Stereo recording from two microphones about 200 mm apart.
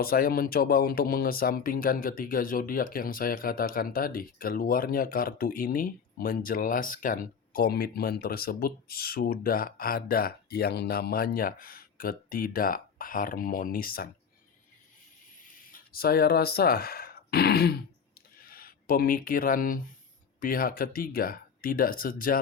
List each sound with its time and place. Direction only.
0.0 s speech: 50° left (ahead or behind)
15.7 s speech: 50° left (ahead or behind)